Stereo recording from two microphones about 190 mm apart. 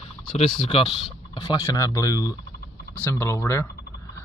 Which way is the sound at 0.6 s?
30° left (ahead or behind).